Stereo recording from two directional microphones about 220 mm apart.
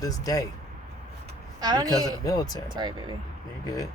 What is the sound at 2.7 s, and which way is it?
Speech, 20° right (ahead or behind).